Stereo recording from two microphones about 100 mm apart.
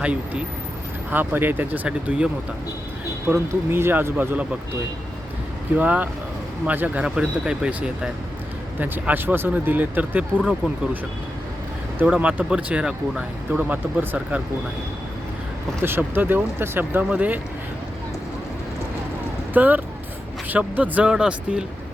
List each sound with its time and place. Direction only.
0.0 s speech: 10° right (ahead or behind)
3.2 s speech: 25° right (ahead or behind)
5.7 s speech: 15° right (ahead or behind)
12.0 s speech: 10° right (ahead or behind)
13.6 s speech: 20° right (ahead or behind)
15.8 s speech: 20° right (ahead or behind)
19.5 s speech: 15° right (ahead or behind)